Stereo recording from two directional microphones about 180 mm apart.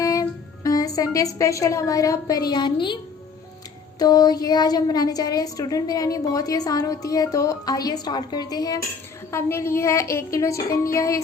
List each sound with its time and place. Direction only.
0.0 s a woman's voice: 20° left (ahead or behind)